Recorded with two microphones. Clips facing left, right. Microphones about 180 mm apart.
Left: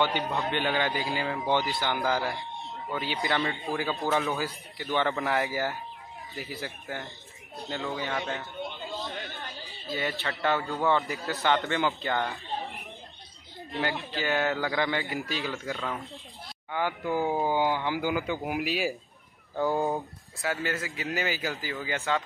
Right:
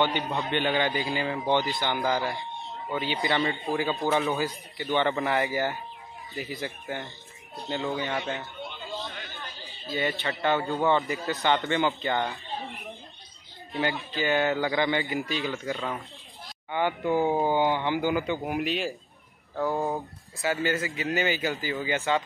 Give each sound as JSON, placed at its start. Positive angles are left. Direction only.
{"t": 0.0, "sound": "speech", "side_deg": 5}
{"t": 9.1, "sound": "chatter", "side_deg": 40}
{"t": 9.6, "sound": "speech", "side_deg": 0}
{"t": 13.7, "sound": "speech", "side_deg": 0}